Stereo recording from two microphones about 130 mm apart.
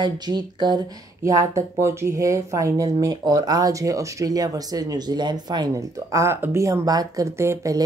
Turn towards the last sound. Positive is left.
turn(degrees=-20)  # may be behind; listen again after turning